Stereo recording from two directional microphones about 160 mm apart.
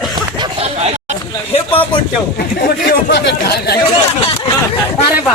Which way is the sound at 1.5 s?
35° left (ahead or behind).